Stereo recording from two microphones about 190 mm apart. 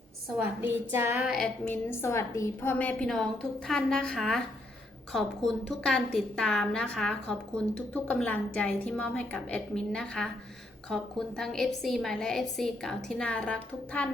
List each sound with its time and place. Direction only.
0.4 s a woman's voice: 10° right (ahead or behind)
1.6 s a woman's voice: 10° left (ahead or behind)